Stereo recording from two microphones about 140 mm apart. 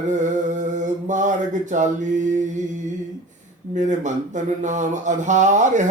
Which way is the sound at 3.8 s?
60° right (ahead or behind).